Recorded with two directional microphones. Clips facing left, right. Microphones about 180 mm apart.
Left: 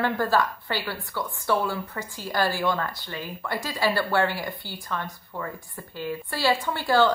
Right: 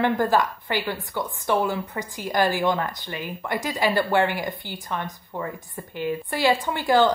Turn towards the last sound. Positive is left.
turn(degrees=-20)  # may be behind; listen again after turning